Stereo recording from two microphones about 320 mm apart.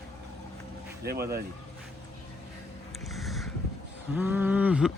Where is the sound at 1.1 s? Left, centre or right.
Right.